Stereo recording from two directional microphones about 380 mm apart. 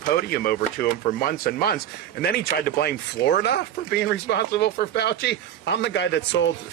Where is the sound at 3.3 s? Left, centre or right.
Left.